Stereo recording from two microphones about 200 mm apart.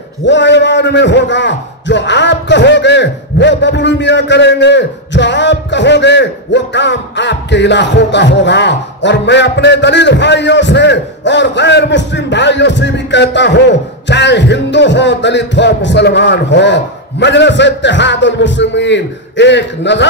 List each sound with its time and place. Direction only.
0.2 s a man's voice: 60° left (ahead or behind)